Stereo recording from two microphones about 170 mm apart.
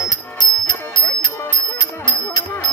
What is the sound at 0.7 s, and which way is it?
Music, 25° left (ahead or behind).